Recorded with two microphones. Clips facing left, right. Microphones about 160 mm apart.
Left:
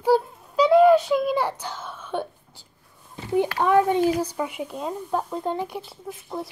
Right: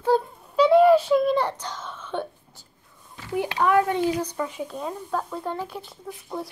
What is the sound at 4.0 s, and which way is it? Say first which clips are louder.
Speech: left 2 dB; 10° left (ahead or behind).